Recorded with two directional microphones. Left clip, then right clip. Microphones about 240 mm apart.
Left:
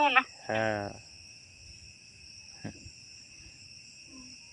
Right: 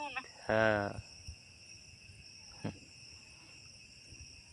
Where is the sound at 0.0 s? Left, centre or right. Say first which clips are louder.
Left 18 dB; left.